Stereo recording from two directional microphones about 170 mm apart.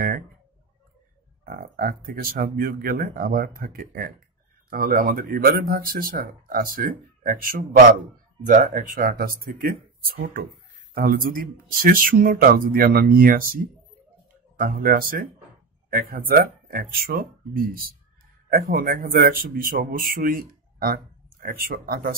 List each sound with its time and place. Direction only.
1.4 s speech: 60° right (ahead or behind)